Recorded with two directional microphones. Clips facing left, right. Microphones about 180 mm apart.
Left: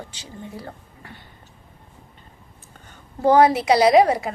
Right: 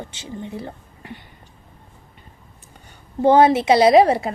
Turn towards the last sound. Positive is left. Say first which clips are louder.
# right 2 dB
turn(degrees=-30)  # may be behind; listen again after turning